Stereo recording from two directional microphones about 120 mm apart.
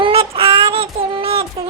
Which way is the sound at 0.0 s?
50° right (ahead or behind).